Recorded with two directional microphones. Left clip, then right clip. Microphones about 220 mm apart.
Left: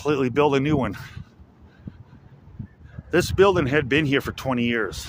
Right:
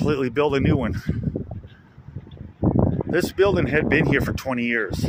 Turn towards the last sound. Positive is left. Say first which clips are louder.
# right 1 dB
turn(degrees=10)  # may be behind; listen again after turning